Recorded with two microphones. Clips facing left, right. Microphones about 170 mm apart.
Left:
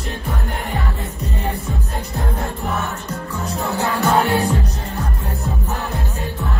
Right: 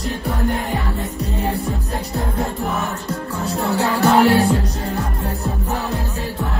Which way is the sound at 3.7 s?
70° right (ahead or behind).